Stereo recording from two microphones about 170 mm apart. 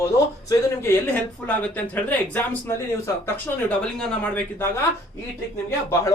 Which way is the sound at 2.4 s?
10° left (ahead or behind).